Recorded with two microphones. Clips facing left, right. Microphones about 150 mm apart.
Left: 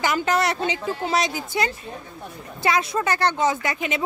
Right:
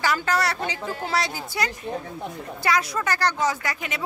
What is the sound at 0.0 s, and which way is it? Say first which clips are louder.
A woman's voice: left 2 dB; 20° left (ahead or behind).